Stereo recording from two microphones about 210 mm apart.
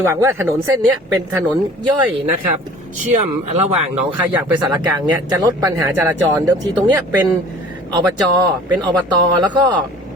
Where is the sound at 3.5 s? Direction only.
30° right (ahead or behind).